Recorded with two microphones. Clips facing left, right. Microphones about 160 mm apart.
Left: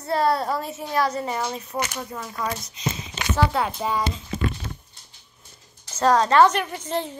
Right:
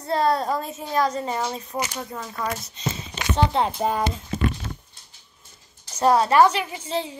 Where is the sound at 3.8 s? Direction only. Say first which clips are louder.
Right 2 dB; 55° right (ahead or behind).